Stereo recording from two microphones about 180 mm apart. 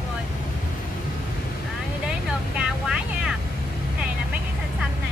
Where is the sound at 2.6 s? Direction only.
5° right (ahead or behind).